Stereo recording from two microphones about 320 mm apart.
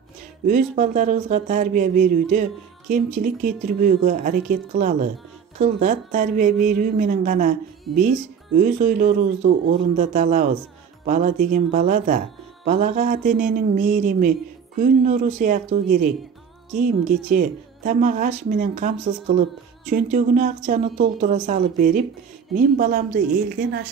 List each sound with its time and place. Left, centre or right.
0.5 s a woman's voice: right
8.5 s a woman's voice: right